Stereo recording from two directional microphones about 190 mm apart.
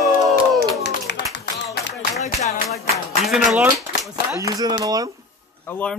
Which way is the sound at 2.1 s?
40° left (ahead or behind).